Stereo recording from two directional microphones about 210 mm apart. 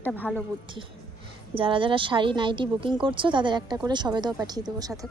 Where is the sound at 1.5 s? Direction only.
25° right (ahead or behind).